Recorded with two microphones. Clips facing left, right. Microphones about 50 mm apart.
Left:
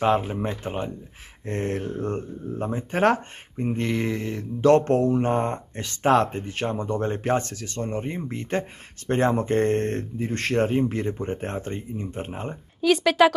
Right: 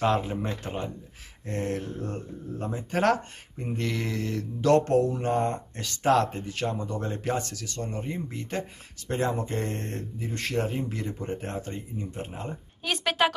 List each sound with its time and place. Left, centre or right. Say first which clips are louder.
0.0 s speech: left 4 dB; left
1.4 s speech: left 3 dB; left
12.8 s a woman's voice: left 8 dB; centre